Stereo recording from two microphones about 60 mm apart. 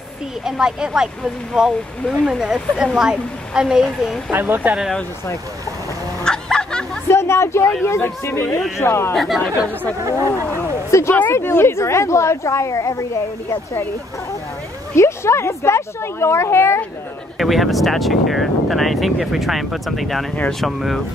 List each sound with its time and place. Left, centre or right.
0.5 s speech: centre
4.3 s speech: right
6.2 s a sound: centre
7.1 s a sound: left
7.8 s speech: left
9.1 s speech: centre
10.1 s speech: left
15.0 s speech: left
17.4 s speech: centre